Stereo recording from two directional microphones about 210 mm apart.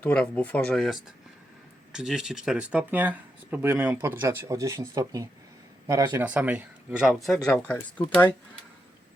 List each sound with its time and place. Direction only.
0.0 s speech: 5° left (ahead or behind)